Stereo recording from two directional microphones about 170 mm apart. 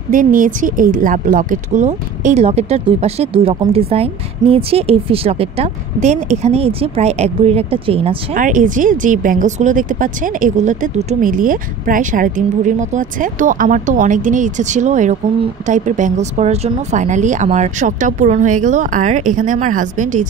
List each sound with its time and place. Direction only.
0.1 s a woman's voice: 50° right (ahead or behind); by 8.4 s 35° right (ahead or behind)
8.4 s speech: 50° right (ahead or behind)